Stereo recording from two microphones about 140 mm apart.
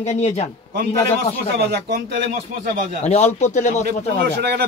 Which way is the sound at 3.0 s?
55° left (ahead or behind).